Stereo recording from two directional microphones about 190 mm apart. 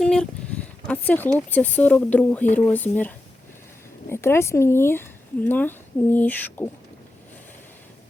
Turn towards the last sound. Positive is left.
turn(degrees=10)  # may be behind; listen again after turning